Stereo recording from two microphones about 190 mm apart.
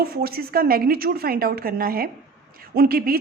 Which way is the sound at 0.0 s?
50° right (ahead or behind).